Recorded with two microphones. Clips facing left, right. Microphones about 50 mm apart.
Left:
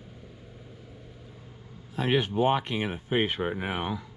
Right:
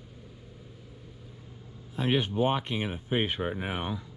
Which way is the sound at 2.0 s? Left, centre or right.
Left.